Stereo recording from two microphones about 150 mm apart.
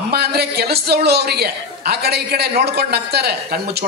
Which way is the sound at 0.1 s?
90° right.